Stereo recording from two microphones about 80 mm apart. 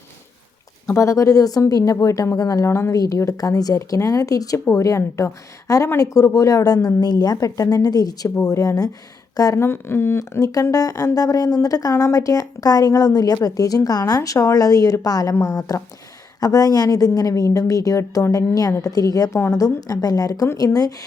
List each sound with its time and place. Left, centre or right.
0.9 s speech: left
2.6 s speech: left
6.8 s speech: left
9.6 s speech: left
10.4 s speech: left
14.2 s speech: left